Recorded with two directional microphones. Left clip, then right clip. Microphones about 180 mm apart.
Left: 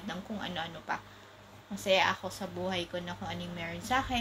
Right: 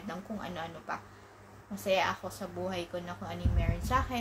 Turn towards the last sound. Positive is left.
turn(degrees=-15)  # may be behind; listen again after turning